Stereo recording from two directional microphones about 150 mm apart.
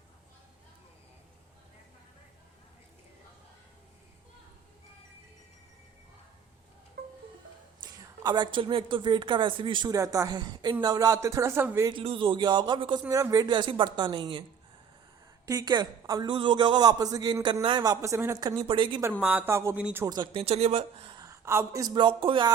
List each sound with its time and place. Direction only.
7.0 s music: 90° right
7.8 s a sound: 30° right (ahead or behind)
8.2 s speech: 30° right (ahead or behind)
9.9 s a man's voice: 20° right (ahead or behind)
11.9 s speech: 35° right (ahead or behind)
15.4 s a man's voice: 25° right (ahead or behind)
19.2 s speech: 10° right (ahead or behind)
20.1 s speech: 30° right (ahead or behind)
21.2 s speech: 20° right (ahead or behind)